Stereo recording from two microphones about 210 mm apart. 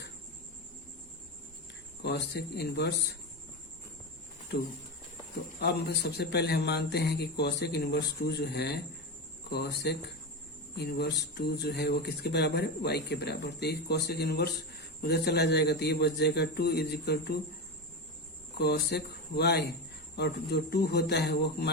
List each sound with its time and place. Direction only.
2.0 s speech: 50° left (ahead or behind)
5.5 s speech: 50° left (ahead or behind)
18.5 s speech: 50° left (ahead or behind)